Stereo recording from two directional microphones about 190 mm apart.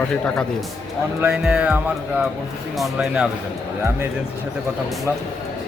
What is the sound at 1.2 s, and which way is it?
Speech, 5° right (ahead or behind).